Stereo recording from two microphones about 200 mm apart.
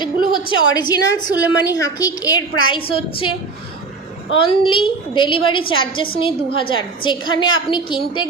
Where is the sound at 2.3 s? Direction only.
90° left.